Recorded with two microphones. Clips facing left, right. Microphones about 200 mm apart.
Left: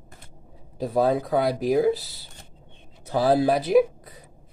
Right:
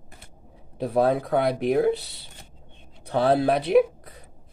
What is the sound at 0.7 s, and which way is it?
Speech, centre (ahead or behind).